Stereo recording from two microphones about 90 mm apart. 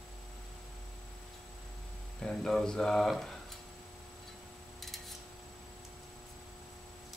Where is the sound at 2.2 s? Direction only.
5° left (ahead or behind).